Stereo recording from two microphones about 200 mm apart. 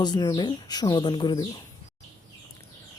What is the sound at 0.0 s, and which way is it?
Speech, 20° left (ahead or behind).